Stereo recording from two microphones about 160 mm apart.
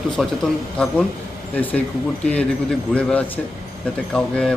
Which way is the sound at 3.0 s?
5° left (ahead or behind).